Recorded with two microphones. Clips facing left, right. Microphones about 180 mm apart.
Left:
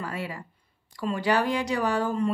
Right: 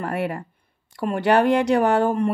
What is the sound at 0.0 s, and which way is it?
Speech, 60° right (ahead or behind).